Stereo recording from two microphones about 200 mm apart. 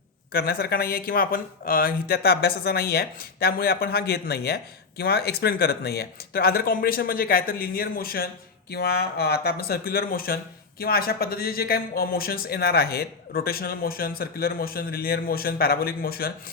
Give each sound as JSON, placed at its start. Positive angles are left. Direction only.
{"t": 0.3, "sound": "speech", "side_deg": 50}